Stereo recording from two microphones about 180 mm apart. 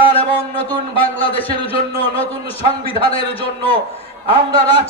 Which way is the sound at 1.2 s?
30° left (ahead or behind).